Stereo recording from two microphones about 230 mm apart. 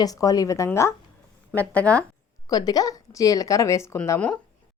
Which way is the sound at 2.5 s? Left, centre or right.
Centre.